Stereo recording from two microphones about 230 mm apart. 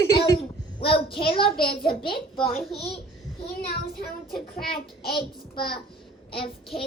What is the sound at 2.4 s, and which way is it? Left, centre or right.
Speech, centre.